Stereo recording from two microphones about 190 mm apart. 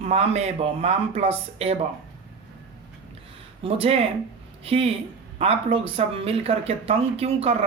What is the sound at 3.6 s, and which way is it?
Speech, 30° right (ahead or behind).